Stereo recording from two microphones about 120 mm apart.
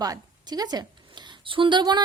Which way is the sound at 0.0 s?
35° right (ahead or behind).